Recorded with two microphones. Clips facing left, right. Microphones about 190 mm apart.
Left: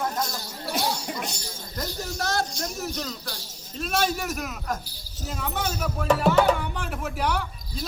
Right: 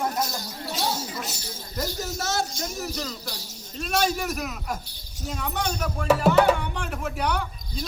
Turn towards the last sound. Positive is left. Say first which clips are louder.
# right 1 dB
turn(degrees=0)  # may be behind; listen again after turning